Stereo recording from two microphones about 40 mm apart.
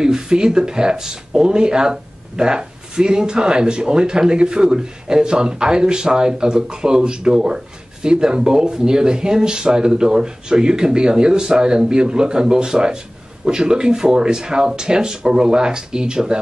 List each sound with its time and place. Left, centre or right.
0.0 s speech: centre